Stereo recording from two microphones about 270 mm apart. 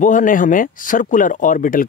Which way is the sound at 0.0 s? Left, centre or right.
Left.